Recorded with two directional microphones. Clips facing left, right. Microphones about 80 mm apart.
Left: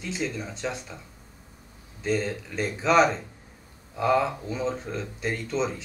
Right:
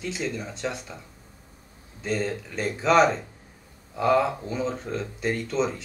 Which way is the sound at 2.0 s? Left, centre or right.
Centre.